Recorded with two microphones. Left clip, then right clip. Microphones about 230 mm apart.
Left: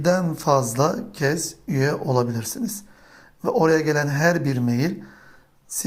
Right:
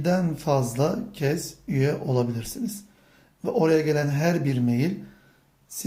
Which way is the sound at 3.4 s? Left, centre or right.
Centre.